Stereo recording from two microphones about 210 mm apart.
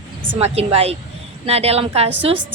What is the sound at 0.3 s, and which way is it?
A woman's voice, 30° right (ahead or behind).